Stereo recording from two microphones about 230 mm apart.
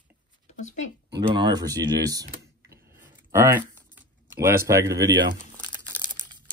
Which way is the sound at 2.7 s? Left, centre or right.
Centre.